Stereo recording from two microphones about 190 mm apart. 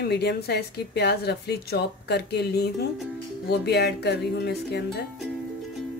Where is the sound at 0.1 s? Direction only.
60° left (ahead or behind).